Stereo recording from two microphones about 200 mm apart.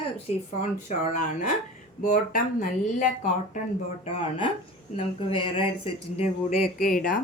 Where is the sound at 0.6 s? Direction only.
40° left (ahead or behind).